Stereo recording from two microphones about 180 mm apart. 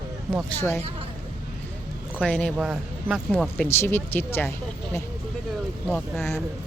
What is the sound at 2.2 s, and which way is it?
Speech, 5° left (ahead or behind).